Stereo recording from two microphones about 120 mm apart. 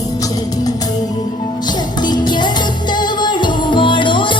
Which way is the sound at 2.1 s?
35° left (ahead or behind).